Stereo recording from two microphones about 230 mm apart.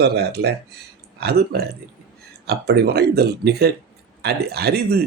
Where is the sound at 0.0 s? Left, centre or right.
Right.